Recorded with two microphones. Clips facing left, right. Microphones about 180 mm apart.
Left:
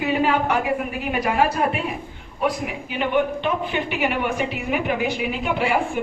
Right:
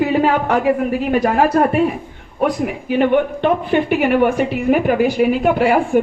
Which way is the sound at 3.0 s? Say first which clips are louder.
Right 6 dB; 50° right (ahead or behind).